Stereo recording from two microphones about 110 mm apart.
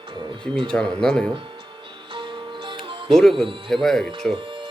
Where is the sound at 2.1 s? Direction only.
50° right (ahead or behind).